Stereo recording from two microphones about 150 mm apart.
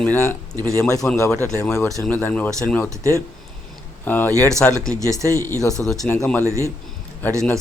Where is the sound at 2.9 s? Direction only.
20° right (ahead or behind).